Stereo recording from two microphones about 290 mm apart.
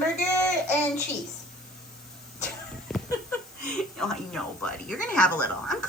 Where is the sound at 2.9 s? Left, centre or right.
Centre.